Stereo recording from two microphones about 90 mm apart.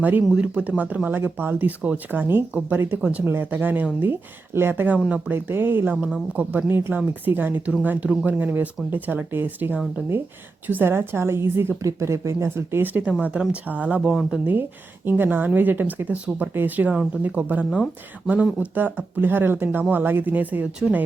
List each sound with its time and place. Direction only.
0.0 s speech: 20° right (ahead or behind)
14.1 s speech: centre (ahead or behind)
15.0 s speech: 20° right (ahead or behind)
18.7 s speech: 20° right (ahead or behind)